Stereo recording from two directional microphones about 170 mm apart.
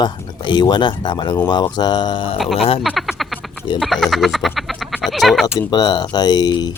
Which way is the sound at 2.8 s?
Centre (ahead or behind).